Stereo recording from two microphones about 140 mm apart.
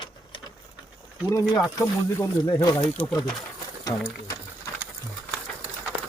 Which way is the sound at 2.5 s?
35° left (ahead or behind).